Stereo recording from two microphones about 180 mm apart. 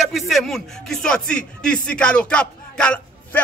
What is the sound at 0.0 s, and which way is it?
Speech, centre (ahead or behind).